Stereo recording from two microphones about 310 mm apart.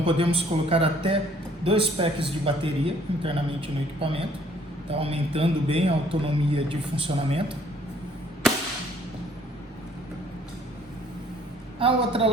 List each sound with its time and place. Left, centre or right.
0.0 s a man's voice: centre
11.8 s a man's voice: centre